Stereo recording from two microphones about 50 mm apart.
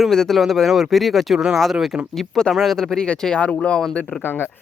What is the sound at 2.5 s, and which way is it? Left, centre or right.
Speech, centre.